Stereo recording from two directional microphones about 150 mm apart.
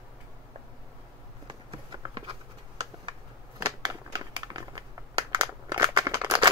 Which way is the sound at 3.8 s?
25° right (ahead or behind).